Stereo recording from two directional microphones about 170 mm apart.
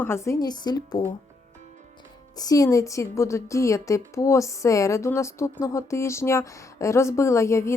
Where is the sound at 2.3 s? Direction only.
20° left (ahead or behind).